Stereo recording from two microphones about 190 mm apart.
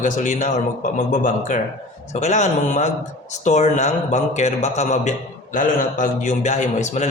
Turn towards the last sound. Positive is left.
turn(degrees=40)  # may be behind; listen again after turning